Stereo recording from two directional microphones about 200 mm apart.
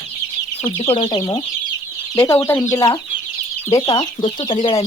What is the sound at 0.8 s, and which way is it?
Speech, 25° left (ahead or behind).